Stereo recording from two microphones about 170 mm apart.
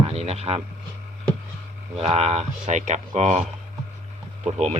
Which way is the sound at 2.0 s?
35° right (ahead or behind).